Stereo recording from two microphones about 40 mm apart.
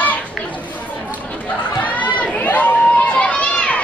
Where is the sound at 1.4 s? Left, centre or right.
Left.